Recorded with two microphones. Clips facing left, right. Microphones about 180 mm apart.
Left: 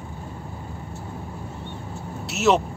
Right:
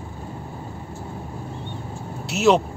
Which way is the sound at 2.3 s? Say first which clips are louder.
Right 2 dB; centre (ahead or behind).